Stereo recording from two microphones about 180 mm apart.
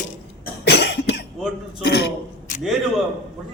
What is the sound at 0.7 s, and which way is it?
Cough, 65° left (ahead or behind).